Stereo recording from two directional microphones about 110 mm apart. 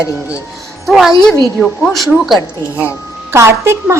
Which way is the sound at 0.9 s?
5° right (ahead or behind).